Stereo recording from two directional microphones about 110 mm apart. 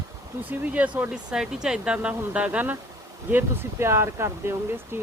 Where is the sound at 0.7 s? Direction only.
10° right (ahead or behind).